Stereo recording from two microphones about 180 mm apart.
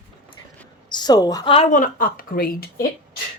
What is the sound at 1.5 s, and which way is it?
Speech, 40° left (ahead or behind).